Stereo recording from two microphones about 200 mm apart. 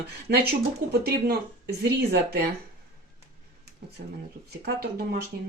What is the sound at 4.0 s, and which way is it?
Speech, 50° right (ahead or behind).